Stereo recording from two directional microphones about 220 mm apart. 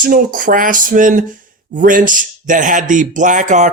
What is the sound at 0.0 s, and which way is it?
Speech, 40° right (ahead or behind).